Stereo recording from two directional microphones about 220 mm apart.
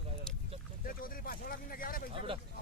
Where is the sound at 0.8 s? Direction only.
40° left (ahead or behind).